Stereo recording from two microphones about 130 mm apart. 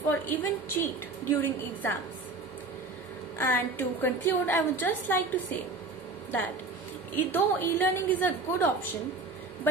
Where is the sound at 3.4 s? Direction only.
15° left (ahead or behind).